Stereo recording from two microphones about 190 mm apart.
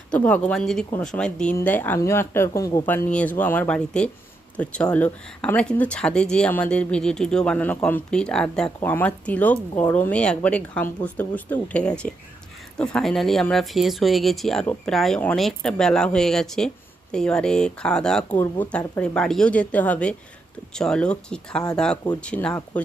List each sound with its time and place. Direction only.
0.1 s speech: 5° left (ahead or behind)